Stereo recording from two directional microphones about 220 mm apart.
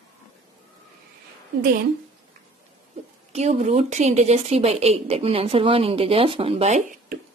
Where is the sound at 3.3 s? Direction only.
30° right (ahead or behind).